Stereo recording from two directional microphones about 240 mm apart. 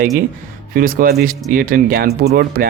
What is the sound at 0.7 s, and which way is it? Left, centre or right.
Speech, right.